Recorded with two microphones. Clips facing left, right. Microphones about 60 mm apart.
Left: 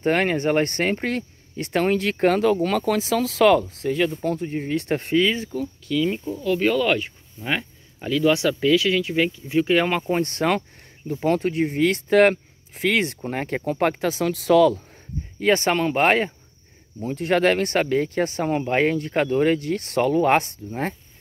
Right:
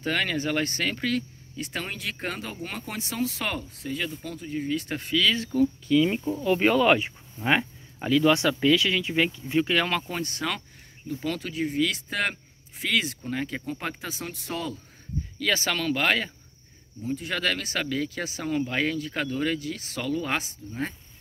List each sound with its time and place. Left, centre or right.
0.0 s speech: left
1.6 s speech: left
5.1 s speech: left
5.5 s speech: centre
5.9 s speech: centre
10.2 s speech: left
15.3 s speech: left
17.0 s speech: left